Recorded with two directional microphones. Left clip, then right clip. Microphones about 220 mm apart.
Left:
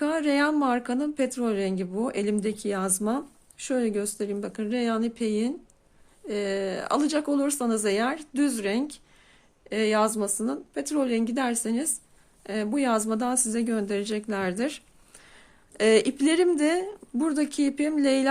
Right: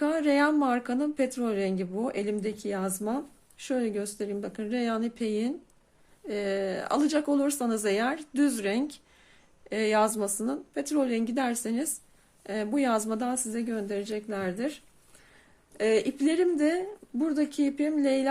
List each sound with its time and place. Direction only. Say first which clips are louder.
0.0 s a woman's voice: even; 15° left (ahead or behind)
15.8 s speech: left 4 dB; 20° left (ahead or behind)